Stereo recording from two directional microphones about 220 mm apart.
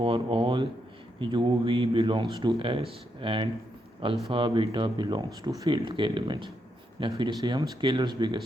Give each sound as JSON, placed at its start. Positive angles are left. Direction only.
{"t": 0.0, "sound": "speech", "side_deg": -25}